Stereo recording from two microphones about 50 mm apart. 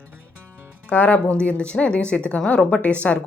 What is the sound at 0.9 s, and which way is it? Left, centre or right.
Speech, left.